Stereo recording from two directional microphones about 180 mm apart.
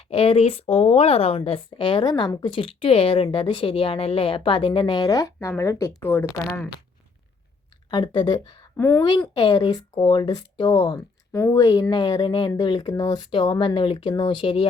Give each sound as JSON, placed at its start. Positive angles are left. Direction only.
{"t": 0.1, "sound": "speech", "side_deg": 30}
{"t": 7.9, "sound": "speech", "side_deg": 25}
{"t": 8.7, "sound": "speech", "side_deg": 15}